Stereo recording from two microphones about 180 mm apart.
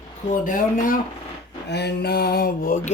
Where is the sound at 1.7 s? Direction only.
65° left (ahead or behind); by 2.9 s 50° left (ahead or behind).